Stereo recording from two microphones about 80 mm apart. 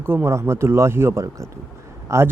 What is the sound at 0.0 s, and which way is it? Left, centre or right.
Speech, right.